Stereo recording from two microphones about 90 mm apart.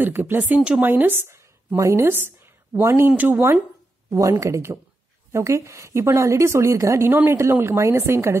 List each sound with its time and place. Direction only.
0.0 s a woman's voice: 20° right (ahead or behind)
4.1 s a woman's voice: 35° right (ahead or behind)